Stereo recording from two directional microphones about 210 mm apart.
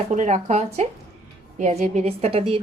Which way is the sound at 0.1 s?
35° right (ahead or behind).